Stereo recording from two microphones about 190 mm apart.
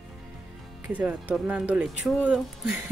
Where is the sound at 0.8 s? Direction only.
10° right (ahead or behind).